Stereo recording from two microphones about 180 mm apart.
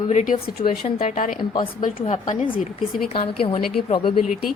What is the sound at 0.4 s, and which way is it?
Speech, 50° left (ahead or behind).